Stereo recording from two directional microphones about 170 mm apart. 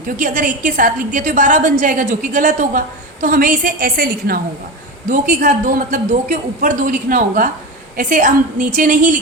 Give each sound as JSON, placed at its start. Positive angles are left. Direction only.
{"t": 0.2, "sound": "a woman's voice", "side_deg": -50}
{"t": 5.0, "sound": "a woman's voice", "side_deg": -50}